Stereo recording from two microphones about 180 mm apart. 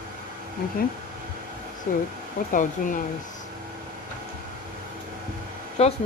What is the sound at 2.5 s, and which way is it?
Speech, 45° left (ahead or behind).